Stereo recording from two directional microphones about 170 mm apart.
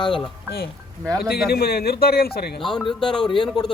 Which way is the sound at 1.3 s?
65° left (ahead or behind).